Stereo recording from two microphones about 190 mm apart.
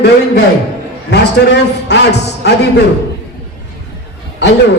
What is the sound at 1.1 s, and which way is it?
A man's voice, 65° left (ahead or behind).